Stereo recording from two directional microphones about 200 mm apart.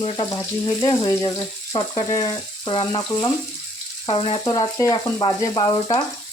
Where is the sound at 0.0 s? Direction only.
20° left (ahead or behind).